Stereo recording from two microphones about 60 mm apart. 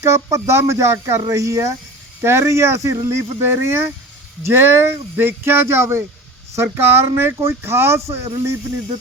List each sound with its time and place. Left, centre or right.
0.0 s speech: right